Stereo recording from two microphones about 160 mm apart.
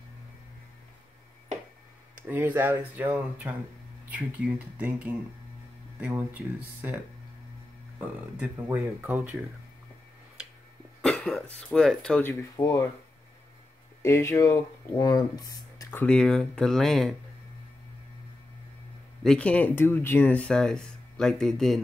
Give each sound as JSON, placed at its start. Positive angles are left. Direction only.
{"t": 2.2, "sound": "speech", "side_deg": -10}
{"t": 8.5, "sound": "speech", "side_deg": -20}
{"t": 11.0, "sound": "speech", "side_deg": 5}
{"t": 14.0, "sound": "speech", "side_deg": 15}
{"t": 19.2, "sound": "speech", "side_deg": 5}